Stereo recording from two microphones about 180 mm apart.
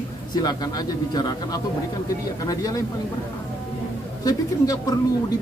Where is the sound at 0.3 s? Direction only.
20° left (ahead or behind).